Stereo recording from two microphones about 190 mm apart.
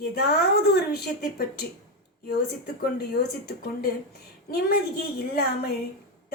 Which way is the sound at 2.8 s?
55° left (ahead or behind).